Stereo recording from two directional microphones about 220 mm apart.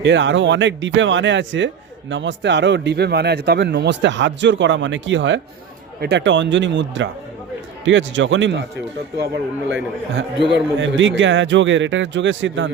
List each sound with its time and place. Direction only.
0.0 s a man's voice: 55° right (ahead or behind)
10.5 s a man's voice: 55° right (ahead or behind)